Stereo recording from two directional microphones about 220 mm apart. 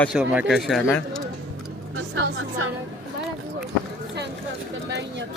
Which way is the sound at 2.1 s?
60° right (ahead or behind).